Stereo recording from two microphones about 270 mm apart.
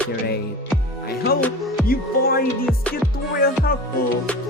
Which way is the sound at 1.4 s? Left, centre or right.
Centre.